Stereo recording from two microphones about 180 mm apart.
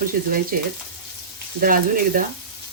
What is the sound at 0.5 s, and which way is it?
Speech, 50° right (ahead or behind).